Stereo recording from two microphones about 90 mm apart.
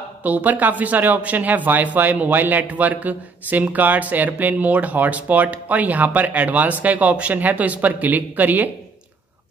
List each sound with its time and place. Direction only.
0.2 s speech: 20° right (ahead or behind)